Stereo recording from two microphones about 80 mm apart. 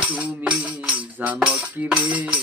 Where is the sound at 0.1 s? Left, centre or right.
Centre.